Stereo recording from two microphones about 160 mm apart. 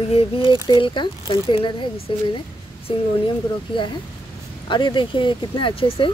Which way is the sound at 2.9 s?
35° left (ahead or behind).